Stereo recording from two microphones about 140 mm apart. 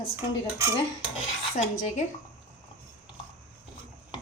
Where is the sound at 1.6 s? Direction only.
55° left (ahead or behind).